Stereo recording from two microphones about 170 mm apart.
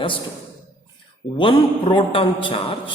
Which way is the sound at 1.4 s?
30° left (ahead or behind).